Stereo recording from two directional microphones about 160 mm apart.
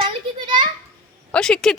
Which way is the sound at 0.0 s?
30° right (ahead or behind).